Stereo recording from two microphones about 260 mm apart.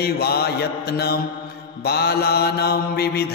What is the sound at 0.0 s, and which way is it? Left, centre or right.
Mantra, left.